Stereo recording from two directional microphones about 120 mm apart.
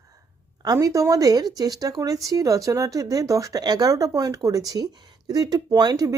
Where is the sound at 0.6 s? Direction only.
30° right (ahead or behind).